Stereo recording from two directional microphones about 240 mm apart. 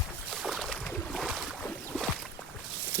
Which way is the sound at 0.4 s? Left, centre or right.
Centre.